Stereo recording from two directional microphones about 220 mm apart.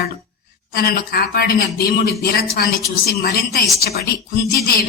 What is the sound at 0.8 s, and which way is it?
Speech, 45° left (ahead or behind).